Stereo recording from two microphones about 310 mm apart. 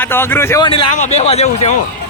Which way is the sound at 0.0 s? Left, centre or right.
Centre.